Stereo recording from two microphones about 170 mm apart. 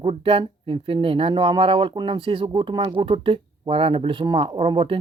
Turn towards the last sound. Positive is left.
turn(degrees=-30)  # may be behind; listen again after turning